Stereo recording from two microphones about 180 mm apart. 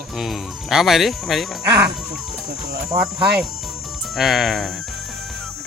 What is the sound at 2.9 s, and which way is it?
Speech, 20° right (ahead or behind).